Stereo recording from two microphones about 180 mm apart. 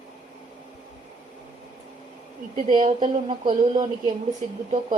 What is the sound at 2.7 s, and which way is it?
Speech, 25° right (ahead or behind).